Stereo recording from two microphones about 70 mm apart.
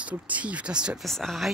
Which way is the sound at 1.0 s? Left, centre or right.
Centre.